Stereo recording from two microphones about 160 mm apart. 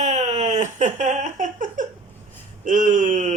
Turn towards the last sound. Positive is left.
turn(degrees=-50)  # may be behind; listen again after turning